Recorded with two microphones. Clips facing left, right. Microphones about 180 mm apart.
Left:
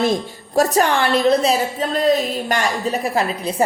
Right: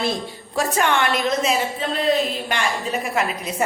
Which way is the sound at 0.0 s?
45° left (ahead or behind).